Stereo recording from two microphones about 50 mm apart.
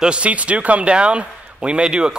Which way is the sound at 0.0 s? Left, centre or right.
Right.